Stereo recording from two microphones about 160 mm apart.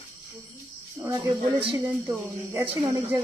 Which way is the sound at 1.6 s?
30° right (ahead or behind).